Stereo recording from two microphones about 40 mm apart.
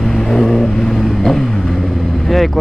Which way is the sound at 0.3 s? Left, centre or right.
Centre.